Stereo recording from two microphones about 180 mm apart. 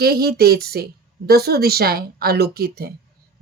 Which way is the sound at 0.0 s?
60° right (ahead or behind).